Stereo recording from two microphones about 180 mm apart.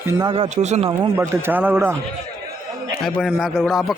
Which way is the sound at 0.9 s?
15° right (ahead or behind).